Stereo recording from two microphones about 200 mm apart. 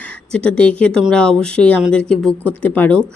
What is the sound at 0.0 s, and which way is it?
Speech, 5° left (ahead or behind).